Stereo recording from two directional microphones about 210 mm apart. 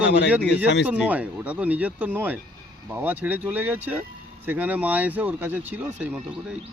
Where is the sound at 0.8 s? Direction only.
5° right (ahead or behind).